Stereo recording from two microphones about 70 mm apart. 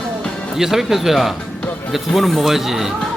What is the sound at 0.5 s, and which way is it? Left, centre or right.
Speech, centre.